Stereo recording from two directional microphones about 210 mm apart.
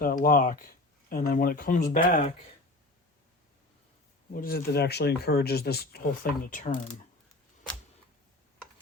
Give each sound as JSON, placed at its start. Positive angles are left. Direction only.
{"t": 0.0, "sound": "speech", "side_deg": 40}
{"t": 4.4, "sound": "speech", "side_deg": 45}